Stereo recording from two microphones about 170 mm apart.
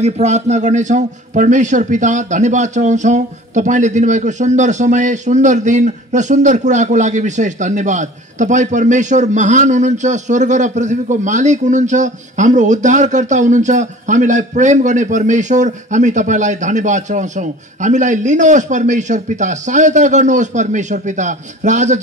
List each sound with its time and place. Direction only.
0.0 s a man's voice: 45° right (ahead or behind)